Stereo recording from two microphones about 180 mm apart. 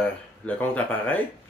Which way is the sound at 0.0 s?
10° left (ahead or behind).